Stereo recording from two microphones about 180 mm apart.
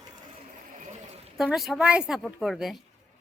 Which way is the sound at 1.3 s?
Centre (ahead or behind).